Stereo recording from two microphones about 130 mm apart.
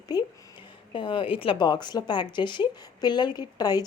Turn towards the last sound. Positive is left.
turn(degrees=30)  # may be behind; listen again after turning